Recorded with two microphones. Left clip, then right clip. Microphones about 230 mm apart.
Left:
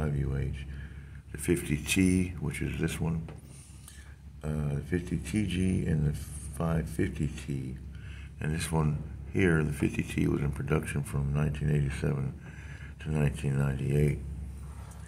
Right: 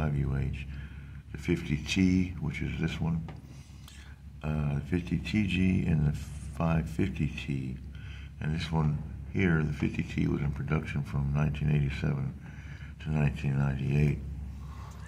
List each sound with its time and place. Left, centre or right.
0.0 s a sound: centre
1.3 s speech: centre
4.4 s speech: centre
8.4 s speech: centre